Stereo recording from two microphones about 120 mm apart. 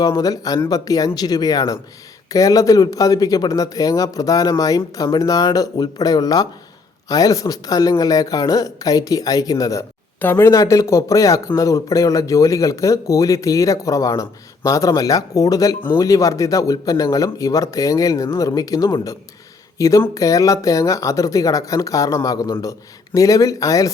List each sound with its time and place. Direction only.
0.0 s a man's voice: 30° left (ahead or behind)